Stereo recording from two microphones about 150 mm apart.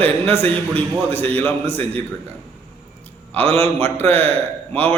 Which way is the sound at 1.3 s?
10° left (ahead or behind).